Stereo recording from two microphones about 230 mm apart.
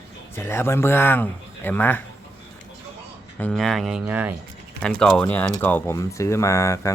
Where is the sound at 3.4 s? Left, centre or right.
Centre.